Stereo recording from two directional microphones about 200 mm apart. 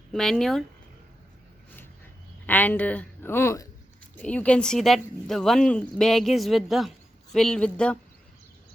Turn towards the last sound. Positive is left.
turn(degrees=5)  # may be behind; listen again after turning